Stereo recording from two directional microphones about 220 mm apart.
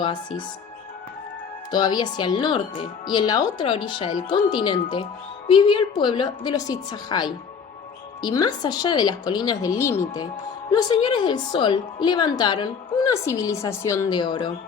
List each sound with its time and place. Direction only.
0.0 s a woman's voice: 20° left (ahead or behind)
1.7 s a woman's voice: 20° left (ahead or behind)